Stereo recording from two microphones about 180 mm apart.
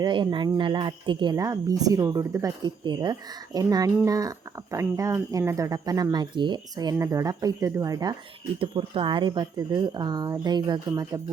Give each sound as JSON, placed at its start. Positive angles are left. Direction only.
{"t": 0.0, "sound": "speech", "side_deg": -25}